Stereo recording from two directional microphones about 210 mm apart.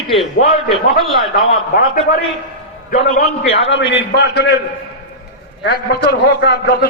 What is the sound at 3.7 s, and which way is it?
Speech, 60° left (ahead or behind).